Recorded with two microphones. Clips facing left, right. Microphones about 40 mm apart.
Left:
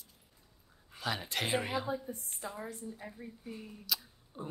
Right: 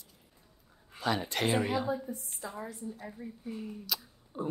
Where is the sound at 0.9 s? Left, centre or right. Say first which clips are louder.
Right 4 dB; centre.